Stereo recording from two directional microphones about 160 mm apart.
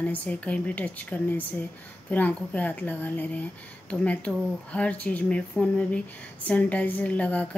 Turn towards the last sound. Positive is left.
turn(degrees=10)  # may be behind; listen again after turning